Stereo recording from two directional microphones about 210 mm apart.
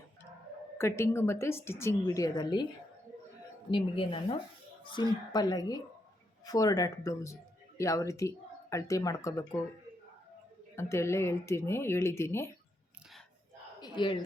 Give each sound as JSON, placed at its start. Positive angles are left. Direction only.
{"t": 0.8, "sound": "a woman's voice", "side_deg": 10}
{"t": 3.7, "sound": "a woman's voice", "side_deg": 25}
{"t": 10.8, "sound": "a woman's voice", "side_deg": 10}
{"t": 13.8, "sound": "speech", "side_deg": 20}